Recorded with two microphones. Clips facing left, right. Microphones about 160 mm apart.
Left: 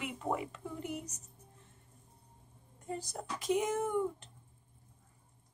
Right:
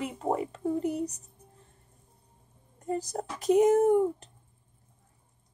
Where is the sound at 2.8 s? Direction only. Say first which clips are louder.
Right 9 dB; 40° right (ahead or behind).